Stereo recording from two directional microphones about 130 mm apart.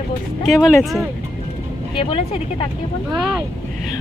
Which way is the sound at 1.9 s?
40° left (ahead or behind).